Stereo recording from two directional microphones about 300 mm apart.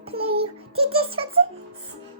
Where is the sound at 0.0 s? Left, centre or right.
Centre.